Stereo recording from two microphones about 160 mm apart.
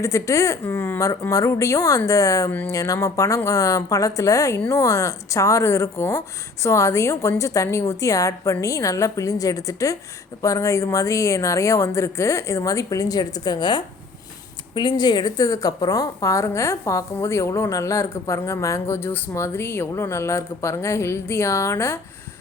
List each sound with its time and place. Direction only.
0.0 s a woman's voice: 20° left (ahead or behind)